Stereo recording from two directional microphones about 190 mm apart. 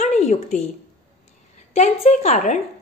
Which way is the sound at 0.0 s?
40° left (ahead or behind).